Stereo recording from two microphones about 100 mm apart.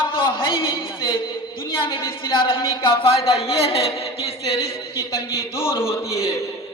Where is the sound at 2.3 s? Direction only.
60° left (ahead or behind).